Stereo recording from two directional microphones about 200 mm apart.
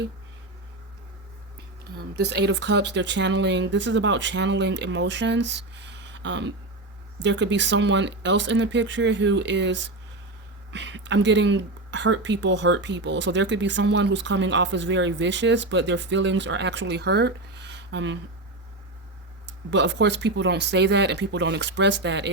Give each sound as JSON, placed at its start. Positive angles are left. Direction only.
{"t": 2.1, "sound": "speech", "side_deg": -55}
{"t": 19.7, "sound": "speech", "side_deg": -60}